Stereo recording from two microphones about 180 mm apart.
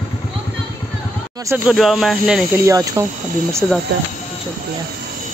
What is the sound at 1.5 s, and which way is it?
Speech, 5° right (ahead or behind).